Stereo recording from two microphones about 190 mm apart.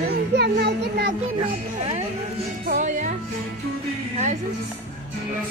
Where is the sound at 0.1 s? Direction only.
60° right (ahead or behind).